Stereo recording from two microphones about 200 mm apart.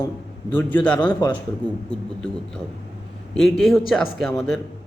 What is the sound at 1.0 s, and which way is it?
Speech, 20° left (ahead or behind).